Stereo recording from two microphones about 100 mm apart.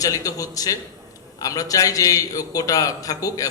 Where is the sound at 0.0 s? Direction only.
35° left (ahead or behind).